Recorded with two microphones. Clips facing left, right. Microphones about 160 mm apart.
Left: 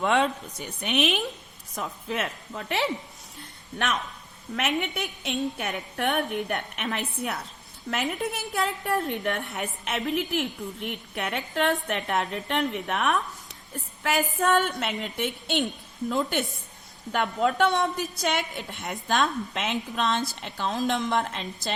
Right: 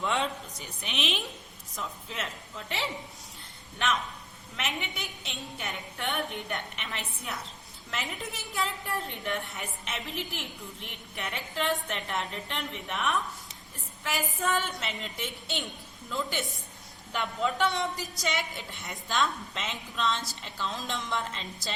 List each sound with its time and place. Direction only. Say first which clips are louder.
0.0 s a woman's voice: left 6 dB; 60° left (ahead or behind)
4.5 s a woman's voice: left 8 dB; 60° left (ahead or behind)